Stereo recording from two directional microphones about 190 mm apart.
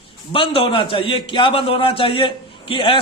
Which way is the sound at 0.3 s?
25° left (ahead or behind).